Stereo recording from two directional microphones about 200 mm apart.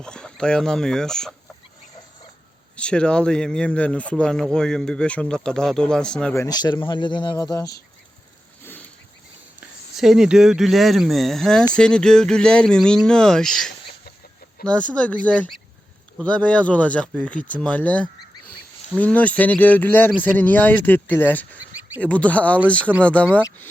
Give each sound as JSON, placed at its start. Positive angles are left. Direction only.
{"t": 0.0, "sound": "speech", "side_deg": 5}
{"t": 2.7, "sound": "speech", "side_deg": 5}
{"t": 9.6, "sound": "speech", "side_deg": 0}